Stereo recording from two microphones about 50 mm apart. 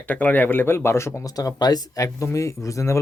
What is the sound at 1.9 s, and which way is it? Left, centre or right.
Speech, left.